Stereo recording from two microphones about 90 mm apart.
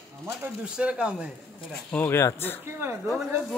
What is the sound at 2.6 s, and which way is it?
Speech, 30° right (ahead or behind).